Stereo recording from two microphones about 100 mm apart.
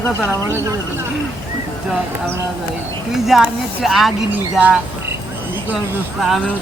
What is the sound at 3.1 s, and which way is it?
Speech, 5° right (ahead or behind).